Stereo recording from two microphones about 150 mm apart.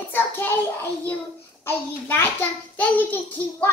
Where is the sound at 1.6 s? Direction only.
15° left (ahead or behind).